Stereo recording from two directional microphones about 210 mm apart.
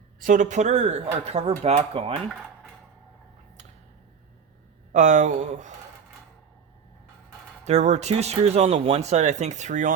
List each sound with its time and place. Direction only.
0.2 s speech: 35° right (ahead or behind)
4.9 s speech: 35° right (ahead or behind)
7.6 s speech: 30° right (ahead or behind)